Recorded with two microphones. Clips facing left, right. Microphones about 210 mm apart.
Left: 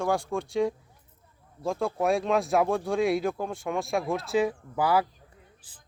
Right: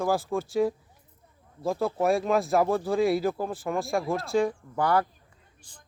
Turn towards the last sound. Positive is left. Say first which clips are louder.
# left 3 dB
turn(degrees=5)  # may be behind; listen again after turning